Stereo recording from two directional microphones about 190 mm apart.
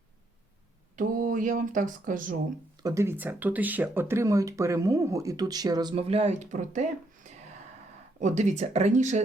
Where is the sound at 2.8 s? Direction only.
15° right (ahead or behind); by 6.8 s 40° right (ahead or behind).